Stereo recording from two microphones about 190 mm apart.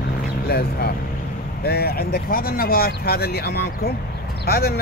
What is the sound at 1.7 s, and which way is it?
Speech, 55° left (ahead or behind).